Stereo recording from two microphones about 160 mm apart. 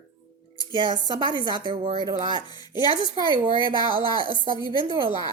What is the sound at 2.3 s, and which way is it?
Speech, 30° left (ahead or behind).